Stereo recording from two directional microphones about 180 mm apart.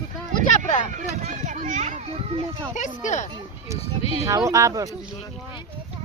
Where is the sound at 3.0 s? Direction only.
40° left (ahead or behind).